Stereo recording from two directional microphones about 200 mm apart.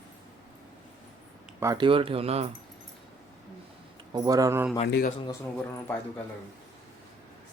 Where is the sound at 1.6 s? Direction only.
20° right (ahead or behind).